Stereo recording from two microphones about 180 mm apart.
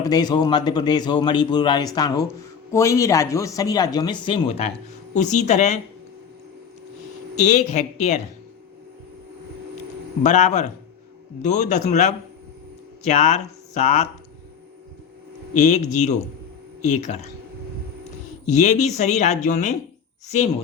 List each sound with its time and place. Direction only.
0.0 s a man's voice: 20° left (ahead or behind)
5.1 s speech: 40° left (ahead or behind)
7.3 s speech: 40° left (ahead or behind)
10.2 s speech: 40° left (ahead or behind)
13.7 s speech: 40° left (ahead or behind)
15.6 s speech: 40° left (ahead or behind)
18.4 s speech: 40° left (ahead or behind)